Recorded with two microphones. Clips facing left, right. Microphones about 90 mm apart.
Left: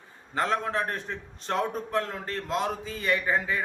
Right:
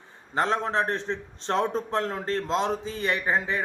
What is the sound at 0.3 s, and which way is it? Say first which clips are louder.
A man's voice: right 2 dB; 25° right (ahead or behind).